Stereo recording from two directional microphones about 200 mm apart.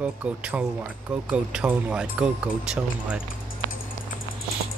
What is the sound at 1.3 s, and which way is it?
Speech, 5° right (ahead or behind).